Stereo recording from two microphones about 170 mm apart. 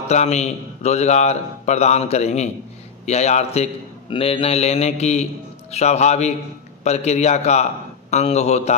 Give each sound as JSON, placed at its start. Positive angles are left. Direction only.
{"t": 0.1, "sound": "a man's voice", "side_deg": 40}